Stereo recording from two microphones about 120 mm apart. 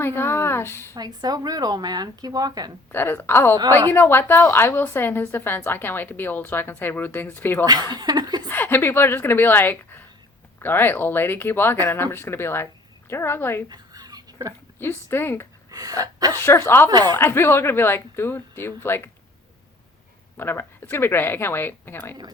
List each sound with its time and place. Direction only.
0.0 s speech: 20° left (ahead or behind)
0.9 s speech: 35° right (ahead or behind)
2.9 s speech: 20° left (ahead or behind)
3.6 s a woman's voice: 30° right (ahead or behind)
3.9 s a woman's voice: 20° left (ahead or behind)
7.6 s speech: 35° right (ahead or behind)
8.4 s a woman's voice: 15° left (ahead or behind)
13.7 s a sound: 30° right (ahead or behind)
14.8 s speech: 20° left (ahead or behind)
15.7 s gasp: 30° right (ahead or behind)
16.4 s speech: 20° left (ahead or behind)
16.9 s speech: 35° right (ahead or behind)
17.2 s speech: 20° left (ahead or behind)
20.3 s a woman's voice: 20° left (ahead or behind)